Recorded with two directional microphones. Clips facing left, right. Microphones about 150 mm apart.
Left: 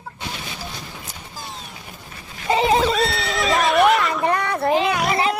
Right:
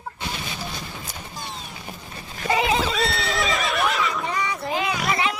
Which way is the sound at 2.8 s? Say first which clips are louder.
Left 4 dB; centre (ahead or behind).